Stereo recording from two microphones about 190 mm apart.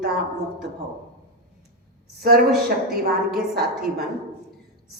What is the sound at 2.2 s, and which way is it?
Speech, 55° right (ahead or behind).